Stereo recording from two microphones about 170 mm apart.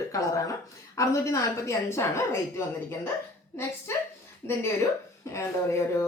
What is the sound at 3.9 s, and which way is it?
Speech, 15° left (ahead or behind).